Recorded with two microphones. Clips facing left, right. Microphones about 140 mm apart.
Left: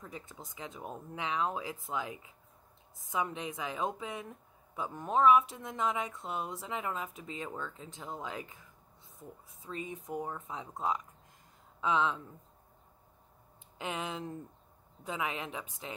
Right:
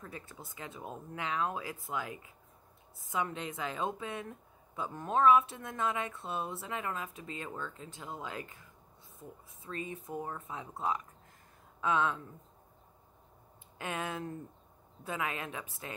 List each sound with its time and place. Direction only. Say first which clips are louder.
0.0 s speech: even; 20° left (ahead or behind)
9.6 s speech: even; 20° left (ahead or behind)
13.7 s speech: even; 20° left (ahead or behind)